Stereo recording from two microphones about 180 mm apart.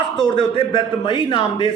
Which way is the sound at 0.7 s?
25° left (ahead or behind).